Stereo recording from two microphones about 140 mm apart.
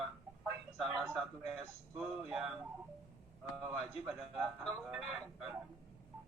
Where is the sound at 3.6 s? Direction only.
Centre (ahead or behind).